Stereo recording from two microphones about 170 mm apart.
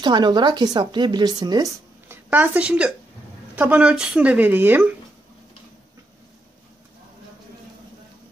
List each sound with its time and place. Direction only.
0.0 s speech: 25° right (ahead or behind)
2.2 s speech: 10° right (ahead or behind)